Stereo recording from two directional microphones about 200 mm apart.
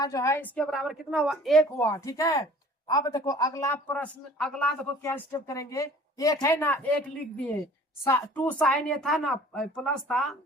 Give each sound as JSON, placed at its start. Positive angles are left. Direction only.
{"t": 0.0, "sound": "speech", "side_deg": 15}
{"t": 1.8, "sound": "a man's voice", "side_deg": 15}
{"t": 8.0, "sound": "speech", "side_deg": 10}